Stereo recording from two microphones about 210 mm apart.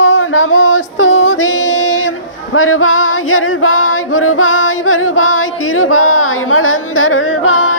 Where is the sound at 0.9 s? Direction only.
65° left (ahead or behind).